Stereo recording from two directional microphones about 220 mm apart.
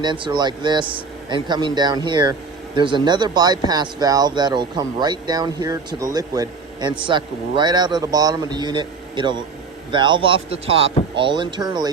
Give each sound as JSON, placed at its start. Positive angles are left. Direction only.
{"t": 0.0, "sound": "a man's voice", "side_deg": -20}